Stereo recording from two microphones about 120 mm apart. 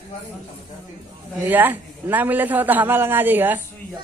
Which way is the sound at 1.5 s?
15° right (ahead or behind).